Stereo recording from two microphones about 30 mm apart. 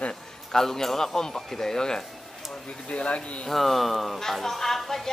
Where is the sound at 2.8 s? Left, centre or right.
Left.